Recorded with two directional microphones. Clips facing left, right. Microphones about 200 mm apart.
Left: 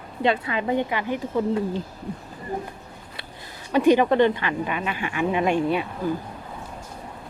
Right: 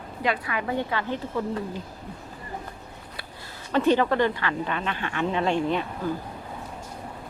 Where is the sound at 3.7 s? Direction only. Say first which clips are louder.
Left 4 dB; 15° left (ahead or behind).